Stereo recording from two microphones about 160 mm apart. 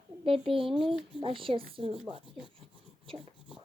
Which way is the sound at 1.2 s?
35° right (ahead or behind).